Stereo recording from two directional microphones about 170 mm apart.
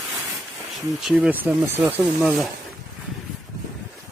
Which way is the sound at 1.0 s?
5° right (ahead or behind).